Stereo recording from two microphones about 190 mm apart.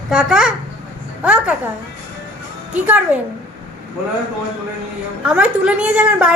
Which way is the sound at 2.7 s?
10° right (ahead or behind).